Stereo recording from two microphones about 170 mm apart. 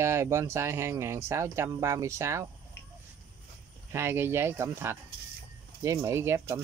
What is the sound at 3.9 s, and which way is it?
Speech, 15° right (ahead or behind).